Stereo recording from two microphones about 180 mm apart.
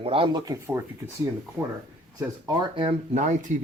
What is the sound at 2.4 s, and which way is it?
Speech, 25° right (ahead or behind).